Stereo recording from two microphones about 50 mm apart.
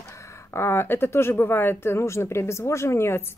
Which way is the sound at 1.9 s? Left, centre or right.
Left.